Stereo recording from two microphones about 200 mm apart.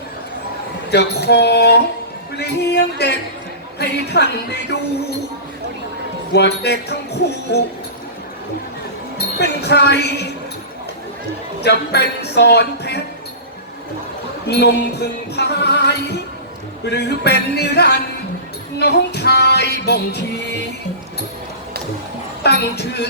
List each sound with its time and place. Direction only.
0.9 s speech: 55° left (ahead or behind)
6.3 s speech: 55° left (ahead or behind)
9.1 s a woman's voice: 55° left (ahead or behind)
11.6 s speech: 55° left (ahead or behind)
14.4 s music: 55° left (ahead or behind)
16.8 s speech: 55° left (ahead or behind)
18.8 s music: 55° left (ahead or behind)
22.7 s speech: 55° left (ahead or behind)